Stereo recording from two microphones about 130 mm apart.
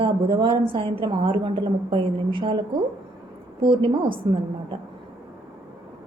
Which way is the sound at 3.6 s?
40° right (ahead or behind).